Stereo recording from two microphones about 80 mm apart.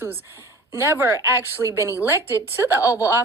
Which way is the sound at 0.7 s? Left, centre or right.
Right.